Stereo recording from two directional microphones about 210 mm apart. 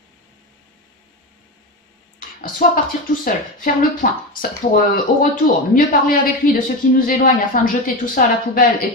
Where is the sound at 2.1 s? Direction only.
40° left (ahead or behind).